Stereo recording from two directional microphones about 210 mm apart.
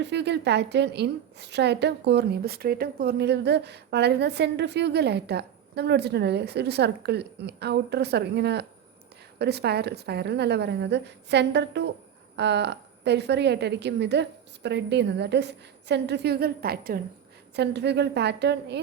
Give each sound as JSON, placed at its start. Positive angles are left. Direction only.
{"t": 0.0, "sound": "a woman's voice", "side_deg": -55}